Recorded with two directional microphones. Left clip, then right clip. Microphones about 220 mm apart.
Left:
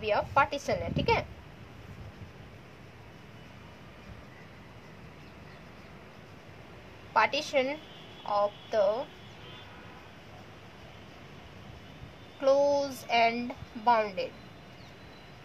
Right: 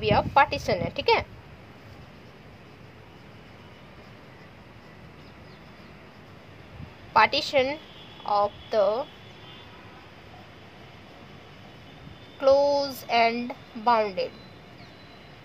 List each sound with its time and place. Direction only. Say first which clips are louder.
0.0 s a woman's voice: right 6 dB; 40° right (ahead or behind)
7.2 s a woman's voice: right 6 dB; 40° right (ahead or behind)
12.4 s a woman's voice: right 4 dB; 30° right (ahead or behind)